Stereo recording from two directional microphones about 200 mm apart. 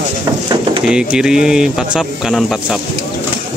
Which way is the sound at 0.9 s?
5° right (ahead or behind).